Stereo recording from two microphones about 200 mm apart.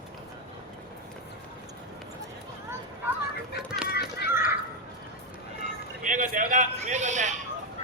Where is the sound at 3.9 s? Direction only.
55° left (ahead or behind).